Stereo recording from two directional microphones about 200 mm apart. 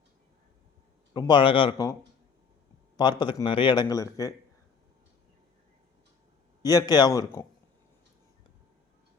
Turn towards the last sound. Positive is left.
turn(degrees=15)  # may be behind; listen again after turning